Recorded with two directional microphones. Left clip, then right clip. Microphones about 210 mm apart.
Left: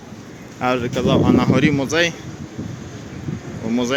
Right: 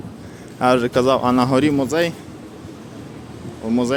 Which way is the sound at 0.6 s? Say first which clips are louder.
Right 4 dB; 20° right (ahead or behind).